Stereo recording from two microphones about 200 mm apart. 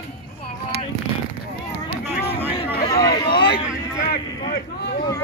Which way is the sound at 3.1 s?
55° left (ahead or behind).